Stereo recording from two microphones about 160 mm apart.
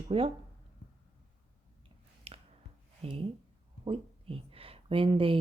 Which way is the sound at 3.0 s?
35° right (ahead or behind).